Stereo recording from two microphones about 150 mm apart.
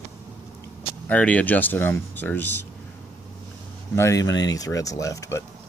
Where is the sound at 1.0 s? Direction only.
10° left (ahead or behind).